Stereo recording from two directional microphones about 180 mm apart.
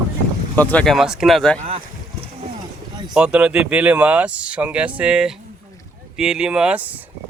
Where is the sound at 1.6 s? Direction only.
35° right (ahead or behind).